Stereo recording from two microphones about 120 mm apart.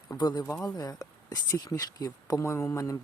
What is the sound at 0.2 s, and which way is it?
Speech, 35° left (ahead or behind).